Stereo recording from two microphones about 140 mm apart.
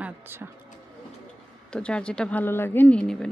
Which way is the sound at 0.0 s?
15° right (ahead or behind).